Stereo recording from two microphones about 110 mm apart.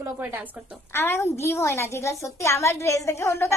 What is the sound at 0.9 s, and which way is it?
A woman's voice, 20° left (ahead or behind).